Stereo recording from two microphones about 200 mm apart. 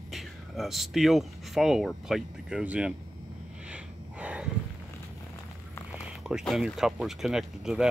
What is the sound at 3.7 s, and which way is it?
Snort, 5° right (ahead or behind).